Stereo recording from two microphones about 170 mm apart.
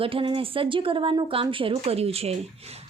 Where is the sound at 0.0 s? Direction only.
30° right (ahead or behind).